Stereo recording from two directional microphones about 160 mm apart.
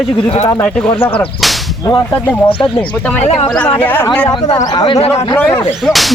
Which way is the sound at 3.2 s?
35° left (ahead or behind).